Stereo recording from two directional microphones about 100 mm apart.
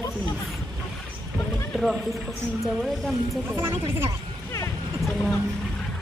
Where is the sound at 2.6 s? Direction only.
Centre (ahead or behind).